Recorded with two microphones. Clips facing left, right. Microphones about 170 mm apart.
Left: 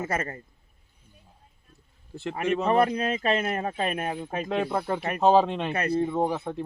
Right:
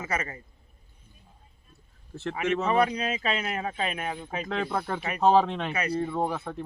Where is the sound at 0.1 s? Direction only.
50° left (ahead or behind).